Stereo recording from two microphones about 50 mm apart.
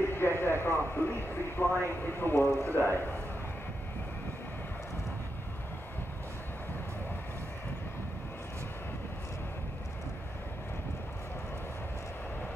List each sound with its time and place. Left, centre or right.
0.0 s speech: left